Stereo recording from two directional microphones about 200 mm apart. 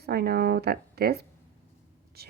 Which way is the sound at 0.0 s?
50° right (ahead or behind).